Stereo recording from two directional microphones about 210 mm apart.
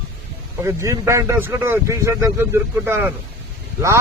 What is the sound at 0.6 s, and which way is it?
Speech, 15° right (ahead or behind).